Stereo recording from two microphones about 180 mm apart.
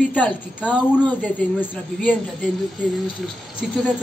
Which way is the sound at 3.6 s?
5° right (ahead or behind).